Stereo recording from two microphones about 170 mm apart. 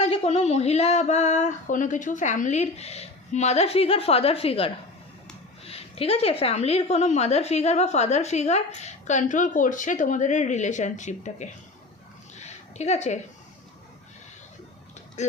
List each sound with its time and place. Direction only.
0.0 s a woman's voice: 40° left (ahead or behind)
12.4 s a sound: 40° left (ahead or behind)
15.2 s speech: 45° left (ahead or behind)